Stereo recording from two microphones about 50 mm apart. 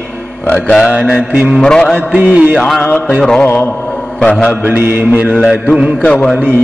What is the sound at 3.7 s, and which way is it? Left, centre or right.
Mantra, centre.